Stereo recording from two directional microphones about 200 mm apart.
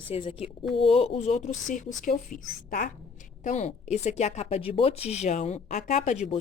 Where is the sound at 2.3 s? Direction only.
45° left (ahead or behind).